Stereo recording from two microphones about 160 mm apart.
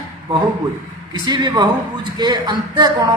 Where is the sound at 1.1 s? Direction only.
25° right (ahead or behind).